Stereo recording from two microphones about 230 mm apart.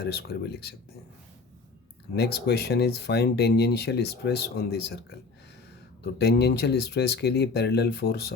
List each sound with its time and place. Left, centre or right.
0.0 s speech: left
2.1 s speech: left
6.0 s speech: left